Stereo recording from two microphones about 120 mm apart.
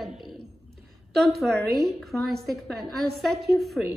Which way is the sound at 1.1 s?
Centre (ahead or behind).